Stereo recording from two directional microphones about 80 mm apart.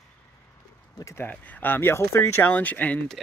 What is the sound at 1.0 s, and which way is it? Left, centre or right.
Speech, left.